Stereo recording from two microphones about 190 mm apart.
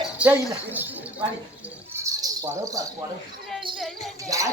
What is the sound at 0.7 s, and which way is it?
Speech, 10° right (ahead or behind).